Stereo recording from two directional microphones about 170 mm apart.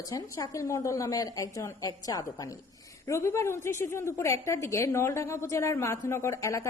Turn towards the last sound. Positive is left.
turn(degrees=15)  # may be behind; listen again after turning